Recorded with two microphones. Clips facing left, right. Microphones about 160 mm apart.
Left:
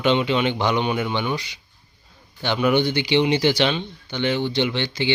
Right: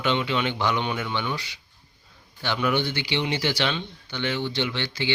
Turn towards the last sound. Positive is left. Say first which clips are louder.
# left 5 dB
turn(degrees=20)  # may be behind; listen again after turning